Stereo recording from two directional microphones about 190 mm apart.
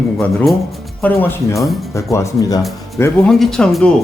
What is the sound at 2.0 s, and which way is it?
Speech, 15° left (ahead or behind).